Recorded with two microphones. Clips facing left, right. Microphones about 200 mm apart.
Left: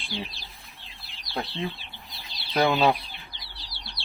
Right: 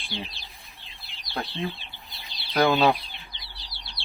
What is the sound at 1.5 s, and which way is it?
Speech, centre (ahead or behind).